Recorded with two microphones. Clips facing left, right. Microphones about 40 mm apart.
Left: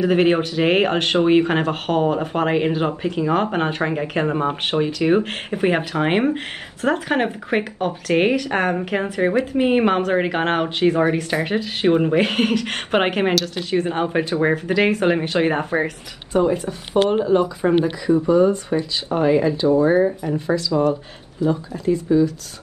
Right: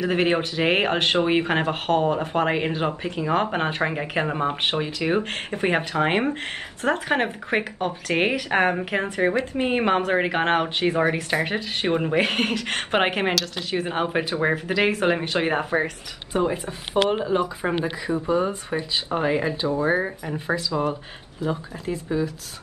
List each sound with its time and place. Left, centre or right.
0.0 s speech: centre
8.9 s speech: centre
16.3 s speech: centre
18.2 s speech: right